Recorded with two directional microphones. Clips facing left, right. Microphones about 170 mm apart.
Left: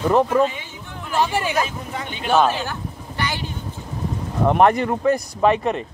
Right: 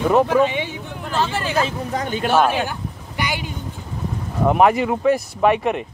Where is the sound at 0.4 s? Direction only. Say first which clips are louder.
Right 2 dB; 75° right (ahead or behind).